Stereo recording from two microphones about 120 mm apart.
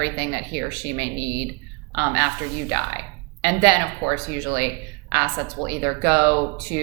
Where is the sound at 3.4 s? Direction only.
20° right (ahead or behind).